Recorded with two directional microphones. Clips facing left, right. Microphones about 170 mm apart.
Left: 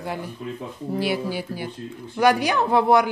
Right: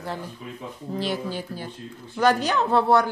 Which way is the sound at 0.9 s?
10° left (ahead or behind).